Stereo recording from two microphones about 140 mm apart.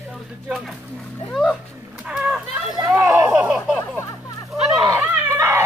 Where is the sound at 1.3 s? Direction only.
Centre (ahead or behind).